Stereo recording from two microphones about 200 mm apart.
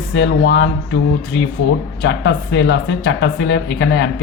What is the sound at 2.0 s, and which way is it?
Speech, 60° left (ahead or behind).